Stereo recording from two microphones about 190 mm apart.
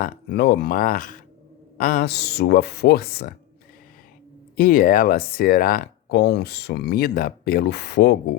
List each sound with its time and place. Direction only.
0.0 s speech: 60° left (ahead or behind)
4.5 s speech: 50° left (ahead or behind)